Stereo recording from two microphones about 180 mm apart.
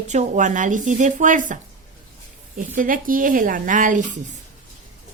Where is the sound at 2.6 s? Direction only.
50° right (ahead or behind).